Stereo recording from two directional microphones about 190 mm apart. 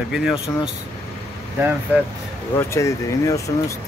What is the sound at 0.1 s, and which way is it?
Speech, 5° right (ahead or behind).